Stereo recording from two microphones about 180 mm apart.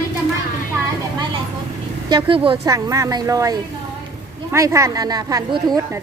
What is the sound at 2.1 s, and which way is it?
A woman's voice, 25° right (ahead or behind).